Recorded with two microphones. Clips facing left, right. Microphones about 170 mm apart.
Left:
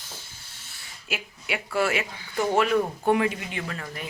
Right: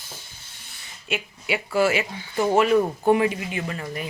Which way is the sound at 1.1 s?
Centre (ahead or behind).